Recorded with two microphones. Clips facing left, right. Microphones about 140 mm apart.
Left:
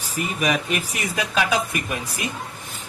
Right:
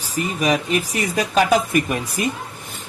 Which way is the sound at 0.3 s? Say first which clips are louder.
Right 4 dB; 35° right (ahead or behind).